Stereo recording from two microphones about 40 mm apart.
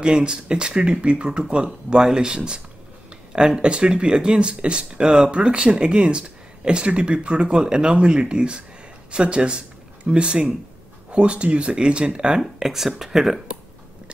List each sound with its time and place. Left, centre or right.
0.0 s speech: right
12.4 s speech: centre